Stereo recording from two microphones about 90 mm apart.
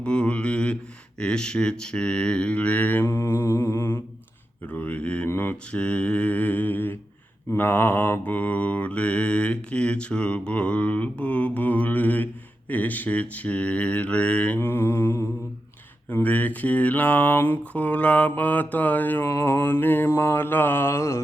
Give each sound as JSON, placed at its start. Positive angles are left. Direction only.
{"t": 0.0, "sound": "mantra", "side_deg": 10}
{"t": 5.3, "sound": "speech", "side_deg": 25}
{"t": 5.8, "sound": "mantra", "side_deg": 10}
{"t": 16.1, "sound": "speech", "side_deg": 20}